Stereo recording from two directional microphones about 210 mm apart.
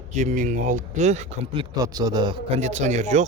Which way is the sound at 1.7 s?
20° right (ahead or behind).